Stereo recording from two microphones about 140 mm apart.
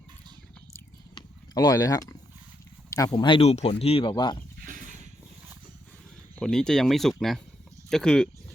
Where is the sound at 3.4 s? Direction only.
45° left (ahead or behind).